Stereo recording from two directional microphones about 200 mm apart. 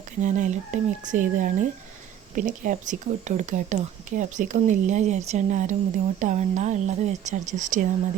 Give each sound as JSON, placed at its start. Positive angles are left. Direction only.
{"t": 0.2, "sound": "speech", "side_deg": -40}